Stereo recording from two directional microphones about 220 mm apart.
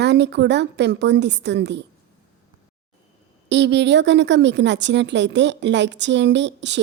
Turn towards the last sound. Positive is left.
turn(degrees=-55)  # may be behind; listen again after turning